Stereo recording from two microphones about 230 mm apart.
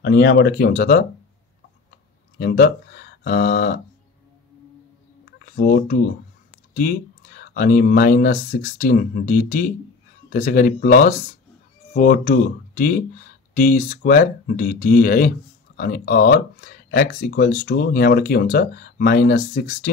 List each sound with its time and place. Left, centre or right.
0.0 s speech: left
2.3 s speech: left
5.4 s speech: left